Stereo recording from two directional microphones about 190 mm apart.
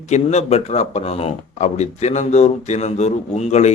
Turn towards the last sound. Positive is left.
turn(degrees=35)  # may be behind; listen again after turning